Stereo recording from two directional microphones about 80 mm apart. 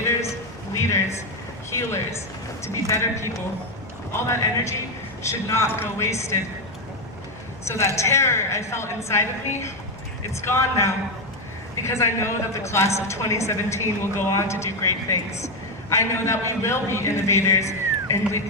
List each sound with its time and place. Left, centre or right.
0.7 s a sound: left
2.6 s a woman's voice: left
7.9 s a woman's voice: left
15.9 s a woman's voice: left